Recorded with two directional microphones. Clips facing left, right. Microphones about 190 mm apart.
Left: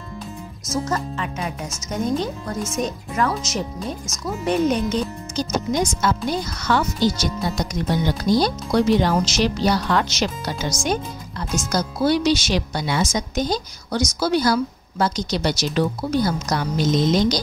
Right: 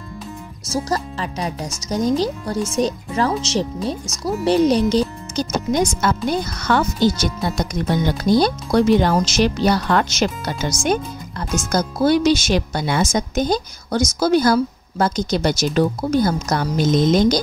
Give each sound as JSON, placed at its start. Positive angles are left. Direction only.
{"t": 0.7, "sound": "speech", "side_deg": -35}
{"t": 5.3, "sound": "speech", "side_deg": -55}